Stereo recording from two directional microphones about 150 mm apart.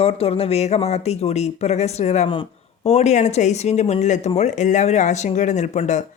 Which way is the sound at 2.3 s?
40° left (ahead or behind).